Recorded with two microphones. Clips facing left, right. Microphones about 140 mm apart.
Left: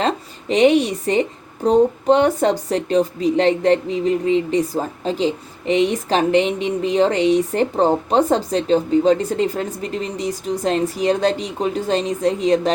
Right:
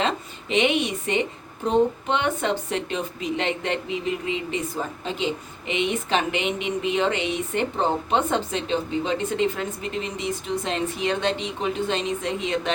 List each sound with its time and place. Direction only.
0.0 s a woman's voice: 40° left (ahead or behind)